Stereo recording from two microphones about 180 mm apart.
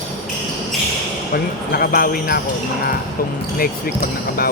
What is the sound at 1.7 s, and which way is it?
Speech, 55° left (ahead or behind).